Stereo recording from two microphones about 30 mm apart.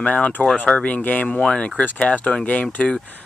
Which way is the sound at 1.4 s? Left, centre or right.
Left.